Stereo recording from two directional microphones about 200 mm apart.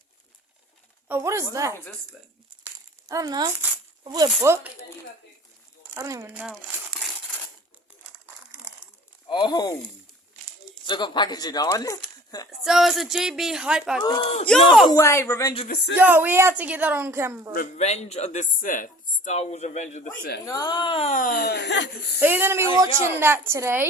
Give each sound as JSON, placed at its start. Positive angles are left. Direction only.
{"t": 1.0, "sound": "speech", "side_deg": -10}
{"t": 1.7, "sound": "speech", "side_deg": 10}
{"t": 3.1, "sound": "speech", "side_deg": -20}
{"t": 6.0, "sound": "speech", "side_deg": -15}
{"t": 6.4, "sound": "crumpling", "side_deg": 0}
{"t": 9.3, "sound": "speech", "side_deg": 20}
{"t": 10.8, "sound": "speech", "side_deg": 20}
{"t": 12.5, "sound": "a woman's voice", "side_deg": 0}
{"t": 14.0, "sound": "speech", "side_deg": 20}
{"t": 16.0, "sound": "speech", "side_deg": -10}
{"t": 17.5, "sound": "speech", "side_deg": 40}
{"t": 20.4, "sound": "speech", "side_deg": 20}
{"t": 21.2, "sound": "speech", "side_deg": 45}
{"t": 22.2, "sound": "speech", "side_deg": -10}